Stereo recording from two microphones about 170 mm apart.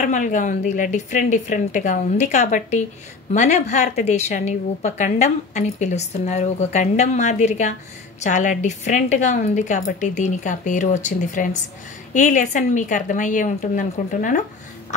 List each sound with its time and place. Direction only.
0.0 s a woman's voice: 50° left (ahead or behind)